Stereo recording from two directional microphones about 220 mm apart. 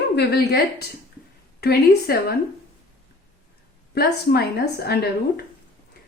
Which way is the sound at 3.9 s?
45° left (ahead or behind).